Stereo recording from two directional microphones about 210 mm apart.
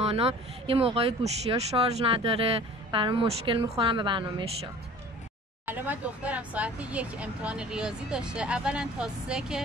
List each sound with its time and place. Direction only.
0.0 s speech: 30° right (ahead or behind)
5.7 s speech: 10° right (ahead or behind)